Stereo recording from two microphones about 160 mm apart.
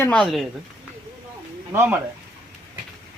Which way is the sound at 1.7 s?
15° right (ahead or behind).